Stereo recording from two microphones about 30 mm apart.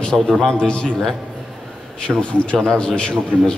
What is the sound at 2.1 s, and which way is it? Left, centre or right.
Speech, right.